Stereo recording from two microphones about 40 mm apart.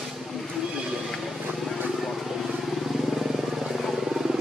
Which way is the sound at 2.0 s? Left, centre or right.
Centre.